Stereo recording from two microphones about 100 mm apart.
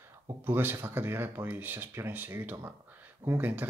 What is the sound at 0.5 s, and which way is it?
Speech, 20° right (ahead or behind).